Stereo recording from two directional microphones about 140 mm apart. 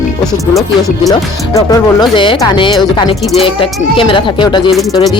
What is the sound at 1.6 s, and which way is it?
Speech, 30° left (ahead or behind).